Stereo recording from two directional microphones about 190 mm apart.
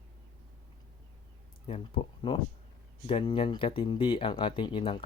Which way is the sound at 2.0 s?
30° left (ahead or behind).